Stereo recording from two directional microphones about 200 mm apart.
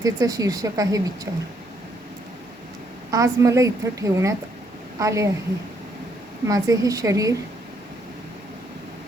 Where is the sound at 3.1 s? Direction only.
15° right (ahead or behind).